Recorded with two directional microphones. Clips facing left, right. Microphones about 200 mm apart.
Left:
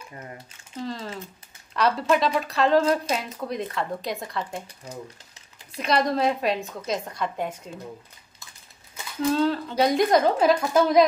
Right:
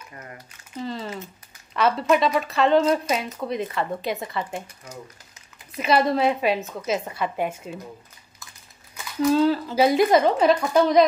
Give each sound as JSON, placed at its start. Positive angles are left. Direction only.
{"t": 0.1, "sound": "speech", "side_deg": 25}
{"t": 0.7, "sound": "speech", "side_deg": 0}
{"t": 5.8, "sound": "speech", "side_deg": -5}
{"t": 9.2, "sound": "speech", "side_deg": 0}